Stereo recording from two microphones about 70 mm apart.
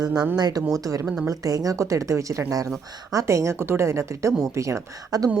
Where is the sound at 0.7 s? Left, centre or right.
Right.